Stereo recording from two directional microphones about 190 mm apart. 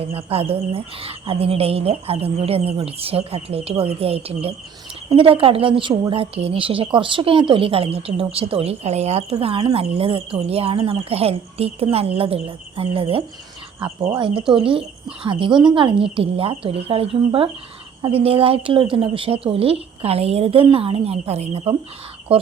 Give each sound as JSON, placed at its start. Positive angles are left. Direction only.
{"t": 0.0, "sound": "a woman's voice", "side_deg": -30}
{"t": 13.7, "sound": "speech", "side_deg": -10}
{"t": 14.3, "sound": "a woman's voice", "side_deg": -25}